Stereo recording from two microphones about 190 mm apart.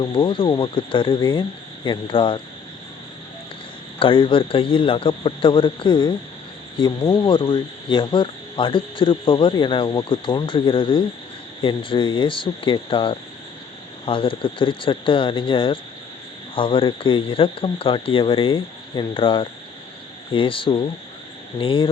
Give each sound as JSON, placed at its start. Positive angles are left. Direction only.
{"t": 0.0, "sound": "speech", "side_deg": 25}
{"t": 4.0, "sound": "speech", "side_deg": 25}